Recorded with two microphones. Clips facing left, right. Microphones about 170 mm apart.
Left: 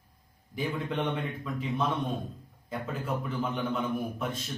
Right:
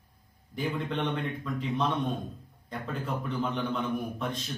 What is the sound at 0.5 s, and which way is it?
A man's voice, centre (ahead or behind).